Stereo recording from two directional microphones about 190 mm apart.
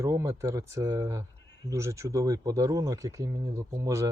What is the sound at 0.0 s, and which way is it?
Speech, 15° right (ahead or behind).